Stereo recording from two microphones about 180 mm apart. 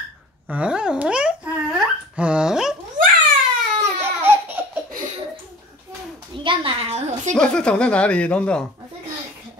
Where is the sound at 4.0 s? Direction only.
10° right (ahead or behind).